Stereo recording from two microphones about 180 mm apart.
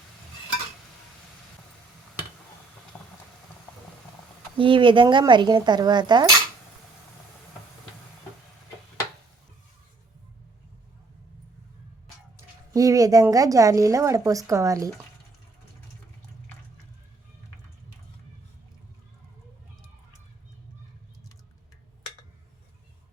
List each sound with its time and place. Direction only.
2.9 s a sound: 20° left (ahead or behind)
4.5 s speech: 30° right (ahead or behind)
12.7 s speech: 20° right (ahead or behind)